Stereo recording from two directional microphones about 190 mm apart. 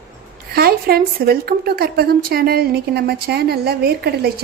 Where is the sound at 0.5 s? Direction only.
55° right (ahead or behind).